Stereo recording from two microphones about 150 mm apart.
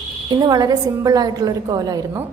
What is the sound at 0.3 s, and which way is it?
A woman's voice, 25° right (ahead or behind).